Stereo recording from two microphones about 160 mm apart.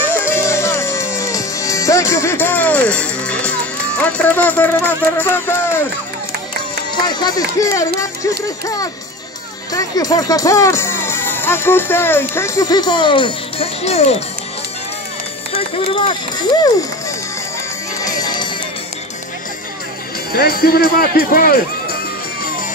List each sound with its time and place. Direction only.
0.1 s music: 15° left (ahead or behind)
4.0 s speech: 10° left (ahead or behind)
7.1 s speech: 25° left (ahead or behind)
9.7 s speech: 20° left (ahead or behind); by 14.1 s 40° left (ahead or behind)
15.7 s speech: 30° left (ahead or behind)
18.0 s music: 25° left (ahead or behind)
20.3 s speech: 75° left (ahead or behind)